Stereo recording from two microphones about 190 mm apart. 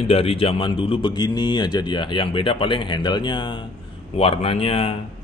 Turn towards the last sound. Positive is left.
turn(degrees=30)  # may be behind; listen again after turning